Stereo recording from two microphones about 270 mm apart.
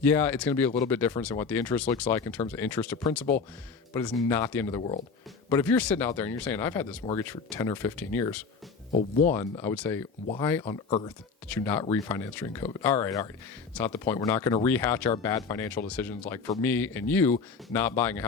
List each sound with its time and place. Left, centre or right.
0.0 s speech: centre
4.8 s speech: left
5.5 s speech: centre
8.9 s speech: left
9.3 s speech: centre